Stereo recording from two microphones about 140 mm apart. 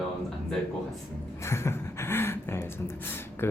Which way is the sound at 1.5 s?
20° left (ahead or behind).